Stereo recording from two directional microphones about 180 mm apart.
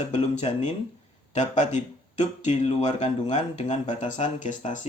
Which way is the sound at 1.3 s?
40° left (ahead or behind).